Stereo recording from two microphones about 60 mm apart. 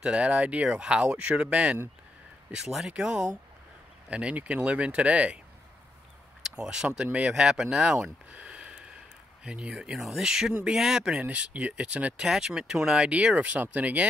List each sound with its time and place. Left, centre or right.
0.0 s speech: centre
2.5 s speech: centre
4.1 s speech: right
6.4 s speech: centre
9.9 s speech: centre
11.1 s speech: right
12.2 s speech: centre
13.1 s speech: right